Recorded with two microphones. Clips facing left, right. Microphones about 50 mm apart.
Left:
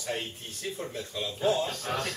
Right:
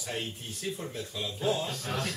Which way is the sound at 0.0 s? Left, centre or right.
Centre.